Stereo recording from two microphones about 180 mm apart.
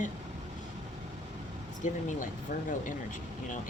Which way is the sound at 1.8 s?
45° left (ahead or behind).